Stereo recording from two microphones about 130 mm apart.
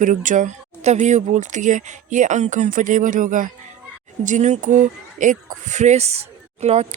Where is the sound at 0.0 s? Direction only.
80° right.